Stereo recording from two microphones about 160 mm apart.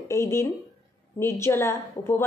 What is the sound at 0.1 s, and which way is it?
A woman's voice, 20° left (ahead or behind).